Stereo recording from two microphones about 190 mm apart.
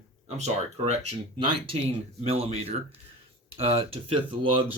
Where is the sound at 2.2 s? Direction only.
30° right (ahead or behind).